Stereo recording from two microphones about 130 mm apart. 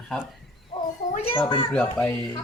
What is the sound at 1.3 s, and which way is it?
Speech, 40° left (ahead or behind).